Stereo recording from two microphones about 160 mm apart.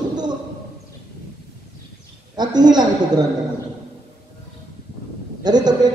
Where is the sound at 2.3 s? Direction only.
25° right (ahead or behind).